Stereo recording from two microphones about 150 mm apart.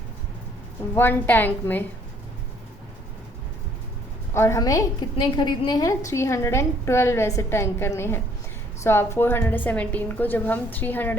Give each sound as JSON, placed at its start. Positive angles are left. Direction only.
{"t": 0.9, "sound": "a woman's voice", "side_deg": 15}
{"t": 4.4, "sound": "a woman's voice", "side_deg": 20}